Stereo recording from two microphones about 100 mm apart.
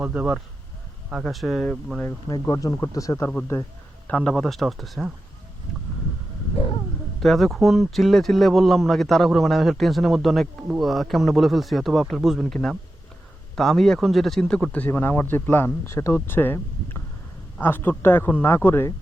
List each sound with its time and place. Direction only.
0.0 s speech: 15° right (ahead or behind)
1.1 s speech: centre (ahead or behind)
2.3 s speech: 35° left (ahead or behind)
4.0 s speech: 10° left (ahead or behind)
7.2 s speech: centre (ahead or behind)
13.6 s speech: 5° left (ahead or behind); by 18.9 s 25° left (ahead or behind)